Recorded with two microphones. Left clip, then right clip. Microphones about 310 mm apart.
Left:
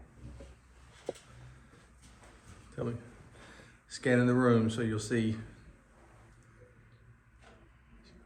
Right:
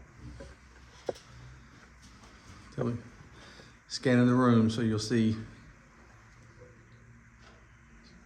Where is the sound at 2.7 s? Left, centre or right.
Centre.